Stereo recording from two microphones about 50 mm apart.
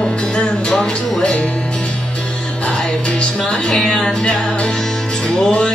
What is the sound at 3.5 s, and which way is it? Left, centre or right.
Music, centre.